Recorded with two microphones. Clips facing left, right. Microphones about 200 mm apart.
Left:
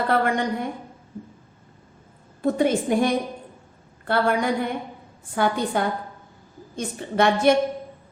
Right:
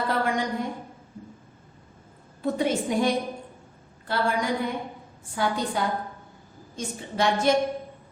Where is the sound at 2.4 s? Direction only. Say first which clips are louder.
Left 4 dB; 55° left (ahead or behind).